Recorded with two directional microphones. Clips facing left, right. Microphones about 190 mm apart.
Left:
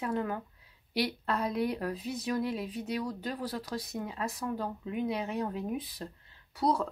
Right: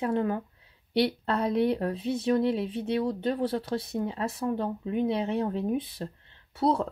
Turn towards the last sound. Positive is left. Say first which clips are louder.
# right 4 dB
turn(degrees=-25)  # may be behind; listen again after turning